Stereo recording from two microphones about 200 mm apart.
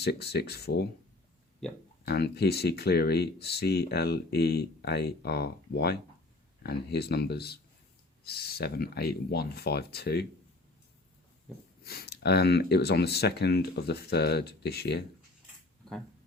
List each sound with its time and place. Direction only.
0.0 s speech: 55° left (ahead or behind)
1.6 s speech: centre (ahead or behind)
2.0 s speech: 55° left (ahead or behind)
11.8 s speech: 50° left (ahead or behind)